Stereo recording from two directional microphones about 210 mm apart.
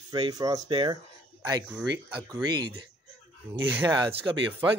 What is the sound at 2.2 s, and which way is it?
Speech, 20° right (ahead or behind).